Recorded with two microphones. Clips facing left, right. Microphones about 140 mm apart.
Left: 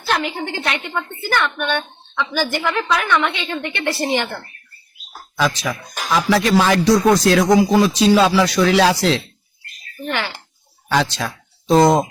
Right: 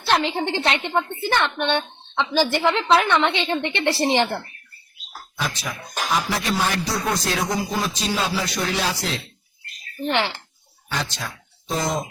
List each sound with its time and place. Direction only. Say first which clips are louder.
0.1 s a woman's voice: right 1 dB; 25° right (ahead or behind)
6.1 s speech: left 9 dB; 90° left
10.0 s a woman's voice: right 2 dB; 25° right (ahead or behind)
10.8 s speech: left 9 dB; 85° left; by 12.0 s 70° left (ahead or behind)